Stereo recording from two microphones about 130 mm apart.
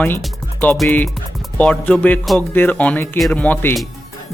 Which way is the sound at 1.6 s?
10° left (ahead or behind).